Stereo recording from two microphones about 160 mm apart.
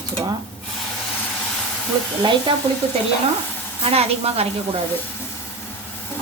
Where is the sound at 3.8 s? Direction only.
40° right (ahead or behind).